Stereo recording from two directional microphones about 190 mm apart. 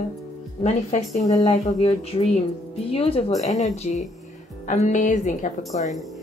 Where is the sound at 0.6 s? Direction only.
35° left (ahead or behind).